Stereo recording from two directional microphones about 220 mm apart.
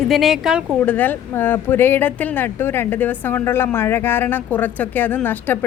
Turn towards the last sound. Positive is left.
turn(degrees=10)  # may be behind; listen again after turning